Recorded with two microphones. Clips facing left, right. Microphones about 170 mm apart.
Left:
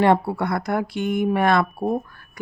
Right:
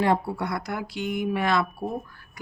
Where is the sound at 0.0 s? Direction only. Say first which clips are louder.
Left 5 dB; 65° left (ahead or behind).